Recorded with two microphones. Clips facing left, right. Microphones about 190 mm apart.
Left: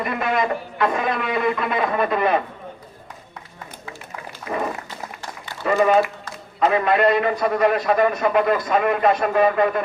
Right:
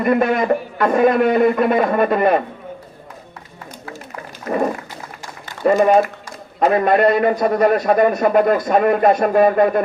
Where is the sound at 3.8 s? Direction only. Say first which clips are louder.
Right 4 dB; 45° right (ahead or behind).